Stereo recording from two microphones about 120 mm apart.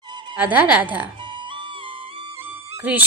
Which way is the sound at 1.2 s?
40° right (ahead or behind).